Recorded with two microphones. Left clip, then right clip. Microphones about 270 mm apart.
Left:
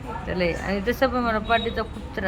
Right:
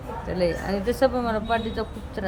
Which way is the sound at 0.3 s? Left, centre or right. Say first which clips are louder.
Even; centre.